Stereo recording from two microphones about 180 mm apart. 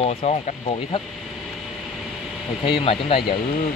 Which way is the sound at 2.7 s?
30° left (ahead or behind).